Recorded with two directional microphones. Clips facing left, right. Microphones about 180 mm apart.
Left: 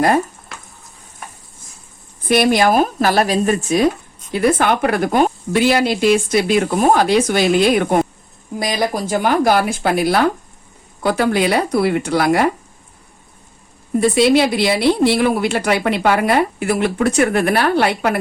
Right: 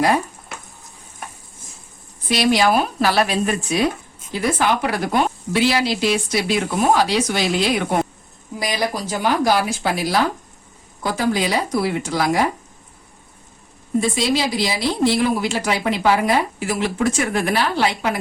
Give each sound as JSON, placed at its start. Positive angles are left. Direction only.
{"t": 2.2, "sound": "speech", "side_deg": 55}
{"t": 4.3, "sound": "a woman's voice", "side_deg": 60}
{"t": 14.0, "sound": "a woman's voice", "side_deg": 65}